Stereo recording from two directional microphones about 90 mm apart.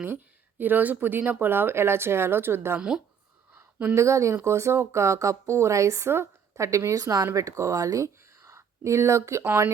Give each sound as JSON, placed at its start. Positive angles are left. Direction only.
{"t": 0.6, "sound": "speech", "side_deg": -20}
{"t": 3.5, "sound": "a sound", "side_deg": -20}
{"t": 3.9, "sound": "speech", "side_deg": -35}